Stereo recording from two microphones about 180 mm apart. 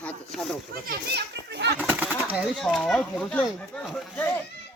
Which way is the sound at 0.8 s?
65° right (ahead or behind).